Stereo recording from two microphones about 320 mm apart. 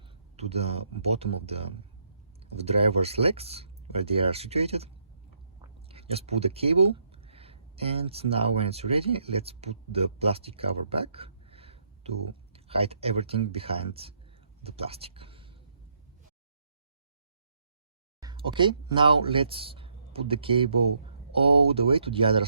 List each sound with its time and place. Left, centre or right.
0.3 s speech: centre
5.9 s speech: centre
18.2 s speech: centre